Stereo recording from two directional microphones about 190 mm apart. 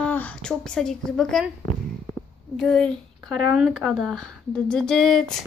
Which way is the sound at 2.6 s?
5° left (ahead or behind).